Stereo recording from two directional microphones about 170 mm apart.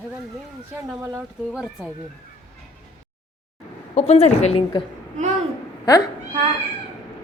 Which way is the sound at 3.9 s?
40° left (ahead or behind).